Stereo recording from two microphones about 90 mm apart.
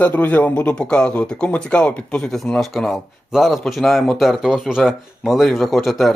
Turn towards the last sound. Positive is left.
turn(degrees=0)  # may be behind; listen again after turning